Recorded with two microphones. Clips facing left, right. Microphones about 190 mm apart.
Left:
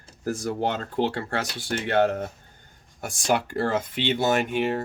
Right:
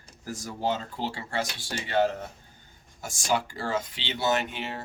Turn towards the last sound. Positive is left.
turn(degrees=50)  # may be behind; listen again after turning